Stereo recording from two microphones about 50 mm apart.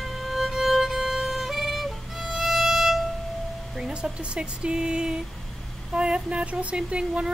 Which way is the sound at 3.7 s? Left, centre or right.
Centre.